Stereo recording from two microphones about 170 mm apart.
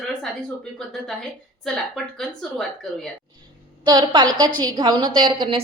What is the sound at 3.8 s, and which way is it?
A woman's voice, 25° right (ahead or behind).